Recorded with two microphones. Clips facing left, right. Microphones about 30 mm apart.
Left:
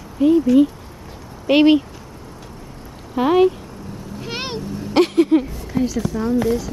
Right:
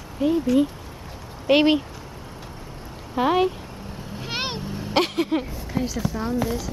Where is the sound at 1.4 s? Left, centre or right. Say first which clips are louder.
Left 4 dB; centre.